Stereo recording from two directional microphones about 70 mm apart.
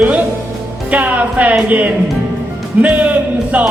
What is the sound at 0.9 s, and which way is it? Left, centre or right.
Speech, right.